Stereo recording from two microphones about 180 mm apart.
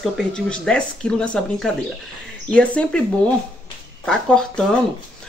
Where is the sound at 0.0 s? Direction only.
5° left (ahead or behind).